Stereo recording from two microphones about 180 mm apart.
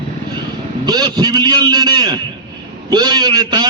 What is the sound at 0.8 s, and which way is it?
A man's voice, 25° right (ahead or behind).